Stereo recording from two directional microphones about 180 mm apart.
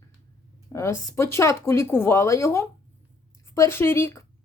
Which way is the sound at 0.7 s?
15° left (ahead or behind).